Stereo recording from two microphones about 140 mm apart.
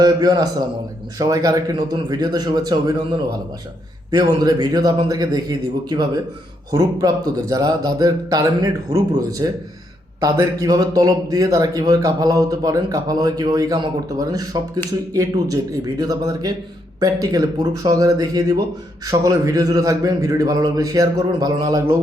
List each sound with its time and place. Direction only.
0.0 s a man's voice: 30° right (ahead or behind)